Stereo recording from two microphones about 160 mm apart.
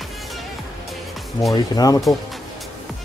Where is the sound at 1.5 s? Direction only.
25° left (ahead or behind).